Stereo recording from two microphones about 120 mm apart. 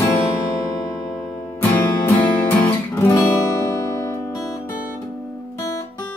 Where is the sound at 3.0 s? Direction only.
25° left (ahead or behind).